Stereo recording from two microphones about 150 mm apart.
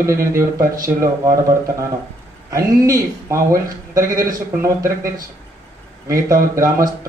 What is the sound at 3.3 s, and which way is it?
Speech, 70° right (ahead or behind).